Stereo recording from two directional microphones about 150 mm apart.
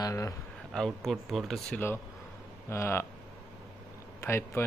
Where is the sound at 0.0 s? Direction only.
20° left (ahead or behind).